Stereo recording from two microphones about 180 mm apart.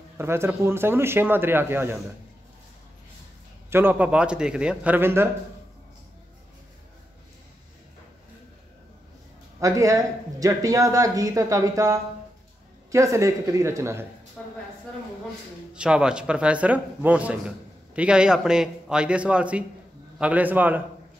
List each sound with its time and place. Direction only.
0.2 s speech: 15° right (ahead or behind)
3.7 s speech: 10° right (ahead or behind)
9.6 s speech: 15° right (ahead or behind)
15.7 s a man's voice: 5° right (ahead or behind)